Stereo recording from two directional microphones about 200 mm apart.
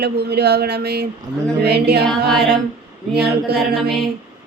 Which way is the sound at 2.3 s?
Centre (ahead or behind).